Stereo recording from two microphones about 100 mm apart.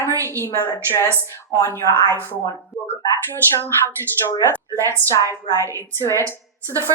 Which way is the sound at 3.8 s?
30° left (ahead or behind).